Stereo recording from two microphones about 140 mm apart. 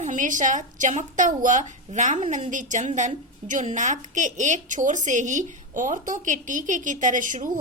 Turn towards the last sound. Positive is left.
turn(degrees=-70)  # may be behind; listen again after turning